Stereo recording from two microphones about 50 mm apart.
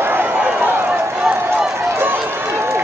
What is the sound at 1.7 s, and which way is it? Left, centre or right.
Run, right.